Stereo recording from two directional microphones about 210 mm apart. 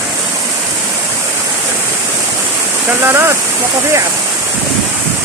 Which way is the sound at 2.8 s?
10° right (ahead or behind).